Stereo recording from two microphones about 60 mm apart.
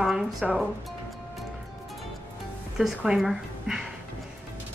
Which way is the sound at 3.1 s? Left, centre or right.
Right.